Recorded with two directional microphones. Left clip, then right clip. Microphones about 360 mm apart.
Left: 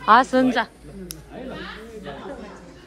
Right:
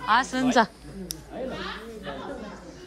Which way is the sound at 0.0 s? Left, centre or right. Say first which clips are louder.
Left 7 dB; centre.